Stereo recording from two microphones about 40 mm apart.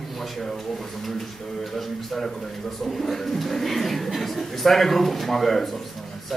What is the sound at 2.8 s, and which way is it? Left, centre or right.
A man's voice, centre.